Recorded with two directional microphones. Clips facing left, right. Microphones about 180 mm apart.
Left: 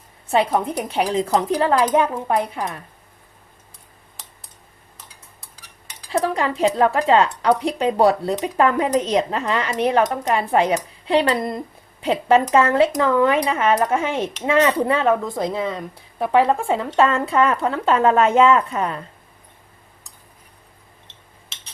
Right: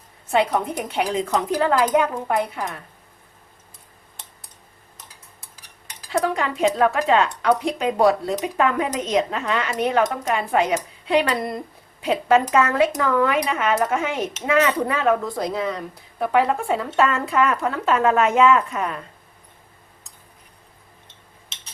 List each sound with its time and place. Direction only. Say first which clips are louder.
0.9 s speech: left 3 dB; 30° left (ahead or behind)
6.1 s speech: left 1 dB; 30° left (ahead or behind)